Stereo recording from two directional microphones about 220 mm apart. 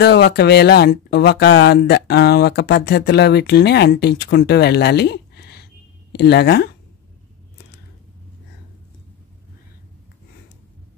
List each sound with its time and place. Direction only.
0.0 s speech: 45° left (ahead or behind)